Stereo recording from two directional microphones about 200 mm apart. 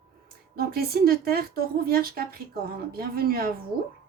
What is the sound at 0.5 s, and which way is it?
A woman's voice, 50° right (ahead or behind).